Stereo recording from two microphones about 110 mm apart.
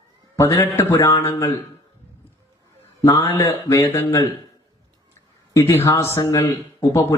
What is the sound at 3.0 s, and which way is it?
Speech, 25° left (ahead or behind).